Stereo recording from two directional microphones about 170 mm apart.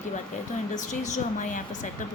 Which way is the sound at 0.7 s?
45° left (ahead or behind).